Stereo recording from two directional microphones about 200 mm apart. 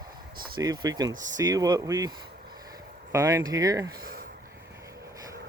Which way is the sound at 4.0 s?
45° right (ahead or behind).